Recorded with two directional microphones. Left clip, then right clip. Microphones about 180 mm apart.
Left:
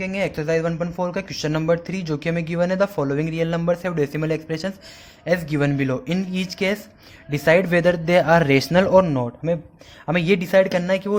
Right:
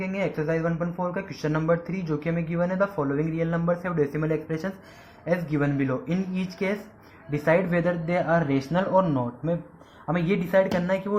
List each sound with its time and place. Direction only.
0.0 s speech: 60° left (ahead or behind)
5.2 s a man's voice: 65° left (ahead or behind)
10.1 s speech: 90° left